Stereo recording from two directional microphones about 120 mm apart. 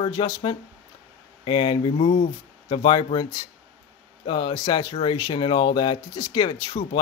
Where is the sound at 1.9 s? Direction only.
70° left (ahead or behind).